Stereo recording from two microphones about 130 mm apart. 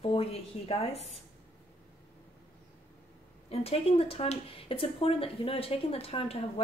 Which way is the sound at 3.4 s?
50° left (ahead or behind).